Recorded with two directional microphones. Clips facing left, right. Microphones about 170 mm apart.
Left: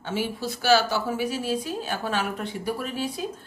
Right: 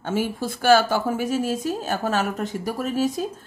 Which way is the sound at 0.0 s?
50° right (ahead or behind).